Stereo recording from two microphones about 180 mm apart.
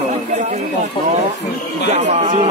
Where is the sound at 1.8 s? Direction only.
40° right (ahead or behind).